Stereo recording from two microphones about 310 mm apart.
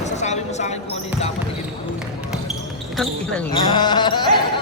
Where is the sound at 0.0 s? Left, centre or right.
Left.